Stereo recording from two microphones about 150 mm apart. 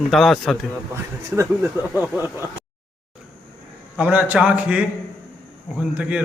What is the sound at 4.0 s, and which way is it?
A man's voice, 10° right (ahead or behind).